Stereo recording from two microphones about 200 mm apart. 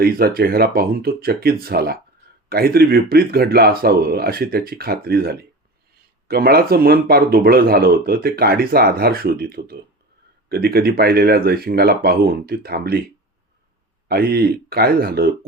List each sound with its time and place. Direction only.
0.0 s speech: 50° right (ahead or behind)
14.1 s speech: 50° right (ahead or behind)